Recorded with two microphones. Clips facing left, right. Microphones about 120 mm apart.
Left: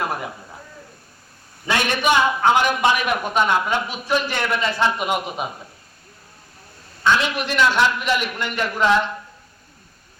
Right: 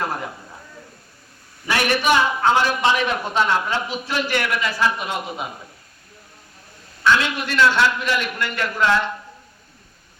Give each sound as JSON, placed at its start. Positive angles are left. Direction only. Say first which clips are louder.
{"t": 1.6, "sound": "a man's voice", "louder": "even", "side_deg": 20}
{"t": 7.0, "sound": "a man's voice", "louder": "even", "side_deg": 20}